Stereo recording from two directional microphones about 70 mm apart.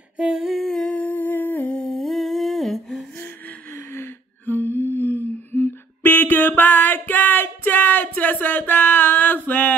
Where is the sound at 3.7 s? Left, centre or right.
Left.